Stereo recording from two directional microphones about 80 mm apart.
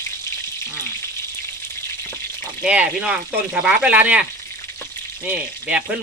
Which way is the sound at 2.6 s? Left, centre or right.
Centre.